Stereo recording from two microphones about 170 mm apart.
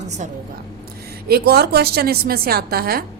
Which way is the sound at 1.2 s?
65° right (ahead or behind).